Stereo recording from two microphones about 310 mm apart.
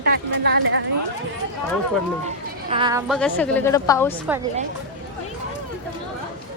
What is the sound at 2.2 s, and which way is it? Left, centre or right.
Speech, centre.